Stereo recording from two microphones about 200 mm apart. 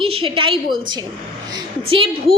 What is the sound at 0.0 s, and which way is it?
A woman's voice, 25° right (ahead or behind).